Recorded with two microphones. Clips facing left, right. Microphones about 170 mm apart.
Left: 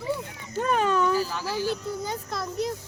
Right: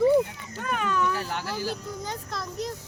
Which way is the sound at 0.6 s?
30° left (ahead or behind).